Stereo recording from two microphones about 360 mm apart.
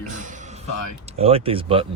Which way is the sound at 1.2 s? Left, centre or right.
Centre.